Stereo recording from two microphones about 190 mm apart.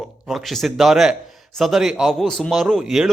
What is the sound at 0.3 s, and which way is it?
A man's voice, centre (ahead or behind).